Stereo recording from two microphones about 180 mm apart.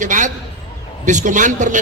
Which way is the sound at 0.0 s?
45° right (ahead or behind).